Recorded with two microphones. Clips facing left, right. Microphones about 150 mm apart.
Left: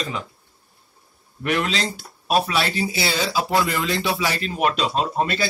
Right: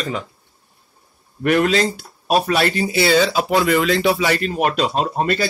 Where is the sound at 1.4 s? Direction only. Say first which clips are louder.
Right 7 dB; 50° right (ahead or behind).